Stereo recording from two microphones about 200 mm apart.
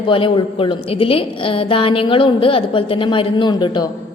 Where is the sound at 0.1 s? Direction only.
25° left (ahead or behind).